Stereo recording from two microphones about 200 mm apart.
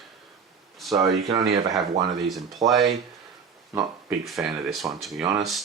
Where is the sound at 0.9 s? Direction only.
20° right (ahead or behind).